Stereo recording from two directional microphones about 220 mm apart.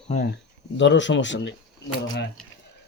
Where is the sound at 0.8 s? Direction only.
55° left (ahead or behind).